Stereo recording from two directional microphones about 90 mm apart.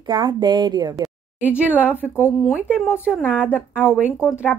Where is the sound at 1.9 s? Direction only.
25° left (ahead or behind).